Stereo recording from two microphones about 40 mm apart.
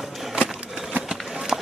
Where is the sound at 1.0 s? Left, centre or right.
Centre.